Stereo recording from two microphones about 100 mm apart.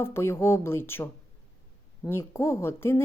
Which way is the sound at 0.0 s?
25° left (ahead or behind).